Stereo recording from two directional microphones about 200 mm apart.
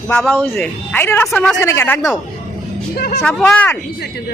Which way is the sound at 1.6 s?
15° left (ahead or behind).